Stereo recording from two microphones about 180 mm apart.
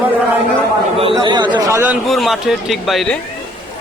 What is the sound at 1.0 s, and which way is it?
Speech, 30° right (ahead or behind).